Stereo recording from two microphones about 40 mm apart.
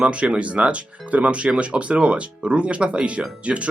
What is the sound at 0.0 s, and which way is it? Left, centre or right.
Speech, right.